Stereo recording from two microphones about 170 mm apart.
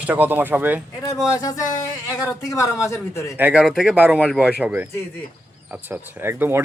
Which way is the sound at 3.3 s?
10° right (ahead or behind).